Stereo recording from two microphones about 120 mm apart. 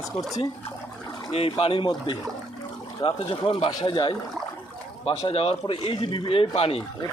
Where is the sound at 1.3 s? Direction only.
55° left (ahead or behind).